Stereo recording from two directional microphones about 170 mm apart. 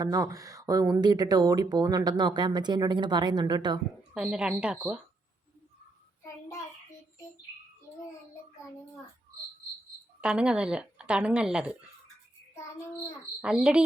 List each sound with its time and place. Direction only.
0.0 s speech: 20° right (ahead or behind)
4.1 s speech: 5° right (ahead or behind)
10.2 s speech: 5° right (ahead or behind)
13.4 s speech: 5° right (ahead or behind)